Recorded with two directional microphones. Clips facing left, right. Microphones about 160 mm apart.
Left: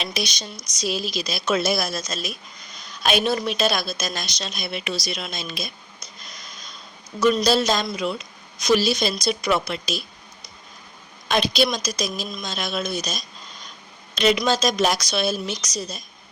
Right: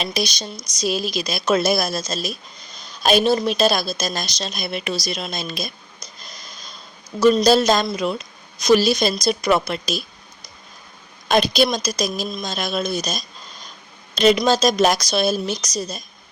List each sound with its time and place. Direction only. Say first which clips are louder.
0.0 s a woman's voice: right 4 dB; 35° right (ahead or behind)
0.8 s a woman's voice: right 4 dB; 45° right (ahead or behind)
6.2 s a sound: right 2 dB; 35° right (ahead or behind)
7.2 s a woman's voice: right 4 dB; 30° right (ahead or behind)
11.3 s a woman's voice: right 4 dB; 45° right (ahead or behind)